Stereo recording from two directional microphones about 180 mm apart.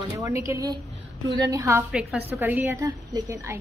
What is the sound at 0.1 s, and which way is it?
A woman's voice, 15° right (ahead or behind).